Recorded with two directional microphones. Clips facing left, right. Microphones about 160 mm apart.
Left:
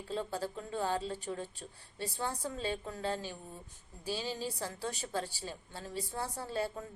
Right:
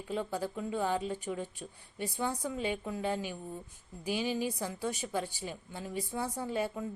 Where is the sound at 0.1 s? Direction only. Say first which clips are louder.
Right 2 dB; 15° right (ahead or behind).